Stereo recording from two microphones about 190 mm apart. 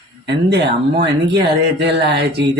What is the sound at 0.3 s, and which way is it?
Speech, 60° right (ahead or behind).